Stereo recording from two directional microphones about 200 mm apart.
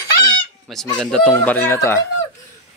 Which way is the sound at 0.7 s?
5° left (ahead or behind).